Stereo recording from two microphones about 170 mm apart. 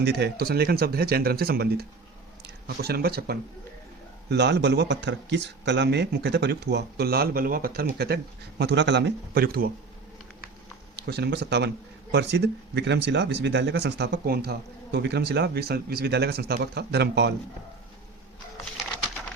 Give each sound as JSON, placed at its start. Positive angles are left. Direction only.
{"t": 0.0, "sound": "speech", "side_deg": -75}
{"t": 4.3, "sound": "a man's voice", "side_deg": -80}
{"t": 10.9, "sound": "a man's voice", "side_deg": -75}